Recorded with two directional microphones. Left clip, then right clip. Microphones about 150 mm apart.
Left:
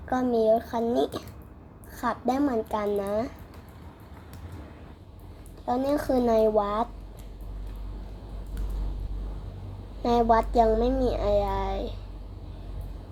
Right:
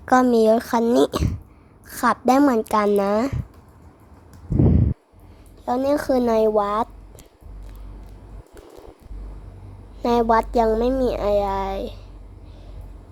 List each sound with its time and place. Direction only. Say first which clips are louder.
0.1 s speech: right 7 dB; 50° right (ahead or behind)
5.6 s speech: right 6 dB; 50° right (ahead or behind)
10.0 s speech: right 4 dB; 50° right (ahead or behind)